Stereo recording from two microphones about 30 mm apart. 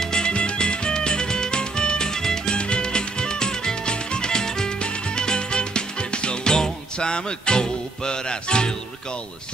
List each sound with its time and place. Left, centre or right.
0.0 s music: left
0.3 s music: left